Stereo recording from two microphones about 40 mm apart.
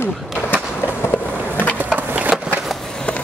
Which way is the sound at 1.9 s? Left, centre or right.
Right.